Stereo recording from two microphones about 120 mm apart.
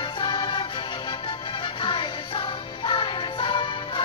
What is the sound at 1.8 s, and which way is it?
Music, 45° left (ahead or behind).